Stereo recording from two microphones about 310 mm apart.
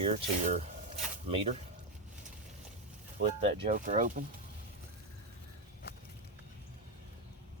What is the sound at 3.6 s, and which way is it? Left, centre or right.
Speech, right.